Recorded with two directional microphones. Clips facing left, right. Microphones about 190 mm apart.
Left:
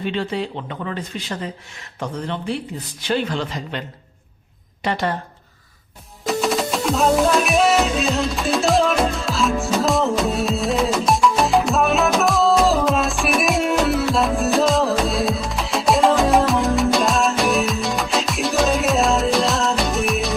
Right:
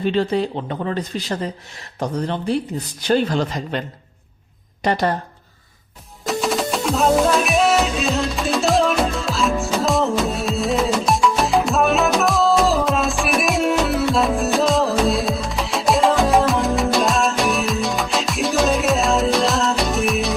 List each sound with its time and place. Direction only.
0.0 s speech: 40° right (ahead or behind)
6.2 s music: centre (ahead or behind)